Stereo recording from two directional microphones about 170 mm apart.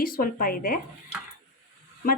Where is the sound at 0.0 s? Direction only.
60° left (ahead or behind).